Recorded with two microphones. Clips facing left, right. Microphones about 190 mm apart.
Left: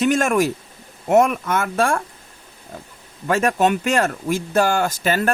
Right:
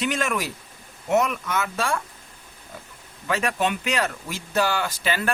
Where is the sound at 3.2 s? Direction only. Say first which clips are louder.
Left 6 dB; 45° left (ahead or behind).